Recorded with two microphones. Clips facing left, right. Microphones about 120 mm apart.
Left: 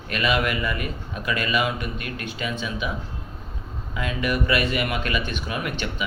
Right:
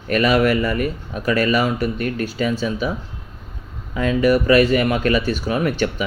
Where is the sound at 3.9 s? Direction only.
35° right (ahead or behind).